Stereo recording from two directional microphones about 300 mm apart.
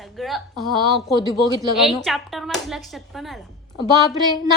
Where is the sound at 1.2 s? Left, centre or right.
Centre.